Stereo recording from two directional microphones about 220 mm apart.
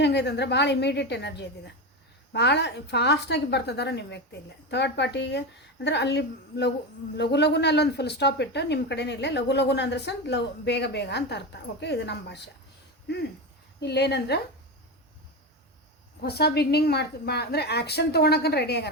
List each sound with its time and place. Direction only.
0.0 s a woman's voice: 50° left (ahead or behind)
13.7 s a woman's voice: 50° left (ahead or behind)
16.2 s a woman's voice: 45° left (ahead or behind)